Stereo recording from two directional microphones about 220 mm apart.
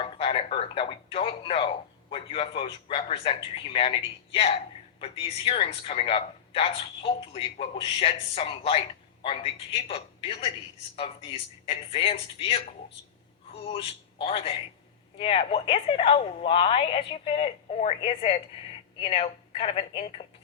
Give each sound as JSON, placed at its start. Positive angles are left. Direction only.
{"t": 0.0, "sound": "a man's voice", "side_deg": 25}